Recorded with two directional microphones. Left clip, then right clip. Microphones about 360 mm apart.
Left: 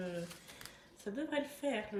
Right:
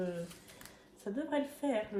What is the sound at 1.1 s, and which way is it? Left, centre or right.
Speech, centre.